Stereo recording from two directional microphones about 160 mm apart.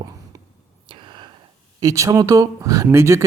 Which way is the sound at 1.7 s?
20° right (ahead or behind).